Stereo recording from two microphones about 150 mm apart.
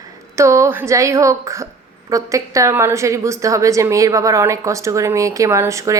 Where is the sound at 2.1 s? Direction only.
20° right (ahead or behind).